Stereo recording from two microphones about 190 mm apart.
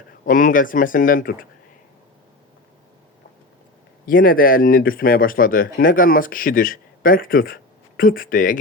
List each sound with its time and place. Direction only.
0.3 s speech: 45° left (ahead or behind)
4.0 s speech: 50° left (ahead or behind)